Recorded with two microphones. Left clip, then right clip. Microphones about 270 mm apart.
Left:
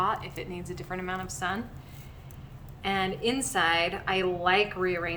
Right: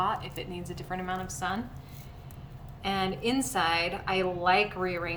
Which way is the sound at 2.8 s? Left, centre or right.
Centre.